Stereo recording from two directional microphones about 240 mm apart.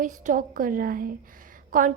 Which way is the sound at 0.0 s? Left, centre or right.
Right.